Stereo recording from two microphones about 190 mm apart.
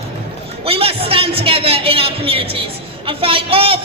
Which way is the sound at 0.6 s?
30° right (ahead or behind).